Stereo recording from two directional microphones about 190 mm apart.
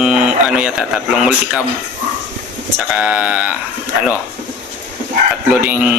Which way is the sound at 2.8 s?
5° right (ahead or behind).